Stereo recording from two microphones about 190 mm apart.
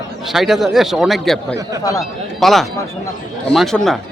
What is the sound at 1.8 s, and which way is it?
Speech, 20° left (ahead or behind).